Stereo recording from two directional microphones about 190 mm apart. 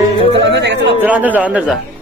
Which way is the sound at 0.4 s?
65° right (ahead or behind).